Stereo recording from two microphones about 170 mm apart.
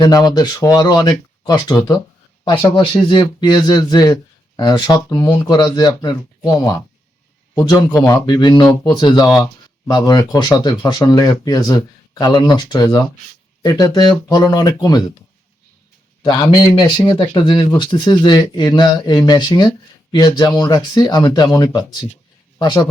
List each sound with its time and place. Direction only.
0.0 s a man's voice: 25° left (ahead or behind)
16.2 s speech: 25° left (ahead or behind)